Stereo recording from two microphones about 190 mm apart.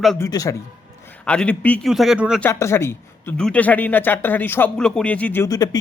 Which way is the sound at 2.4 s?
15° left (ahead or behind).